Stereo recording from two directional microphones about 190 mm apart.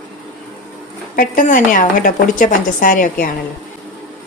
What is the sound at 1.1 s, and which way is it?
Speech, 45° left (ahead or behind).